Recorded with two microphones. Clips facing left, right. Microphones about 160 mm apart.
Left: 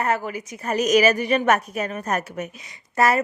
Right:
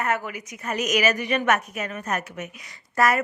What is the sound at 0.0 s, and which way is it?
A woman's voice, 30° left (ahead or behind).